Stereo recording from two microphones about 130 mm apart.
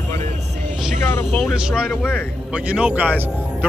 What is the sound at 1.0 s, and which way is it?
Speech, 15° left (ahead or behind).